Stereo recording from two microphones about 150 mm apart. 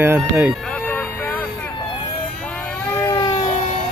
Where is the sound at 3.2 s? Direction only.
35° left (ahead or behind).